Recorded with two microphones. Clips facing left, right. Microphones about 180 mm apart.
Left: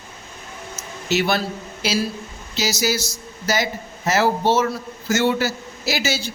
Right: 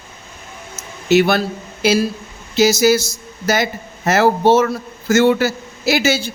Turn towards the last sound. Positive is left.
turn(degrees=-55)  # may be behind; listen again after turning